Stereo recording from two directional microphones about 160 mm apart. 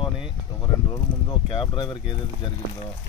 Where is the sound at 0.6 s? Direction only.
25° left (ahead or behind).